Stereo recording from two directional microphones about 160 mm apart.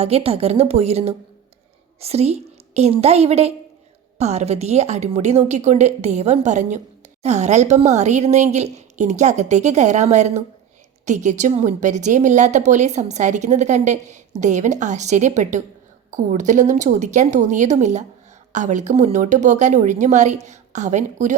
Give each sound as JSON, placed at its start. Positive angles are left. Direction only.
{"t": 0.0, "sound": "a woman's voice", "side_deg": -40}